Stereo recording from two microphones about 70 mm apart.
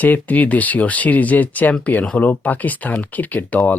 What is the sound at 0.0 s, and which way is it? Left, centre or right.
Speech, left.